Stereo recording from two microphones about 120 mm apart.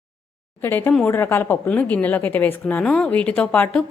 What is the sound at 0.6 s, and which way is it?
A woman's voice, 20° left (ahead or behind).